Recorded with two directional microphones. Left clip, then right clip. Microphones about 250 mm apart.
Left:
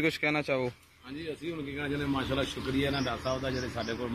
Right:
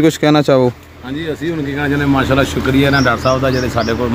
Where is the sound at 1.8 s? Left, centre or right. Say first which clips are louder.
Right 18 dB; centre.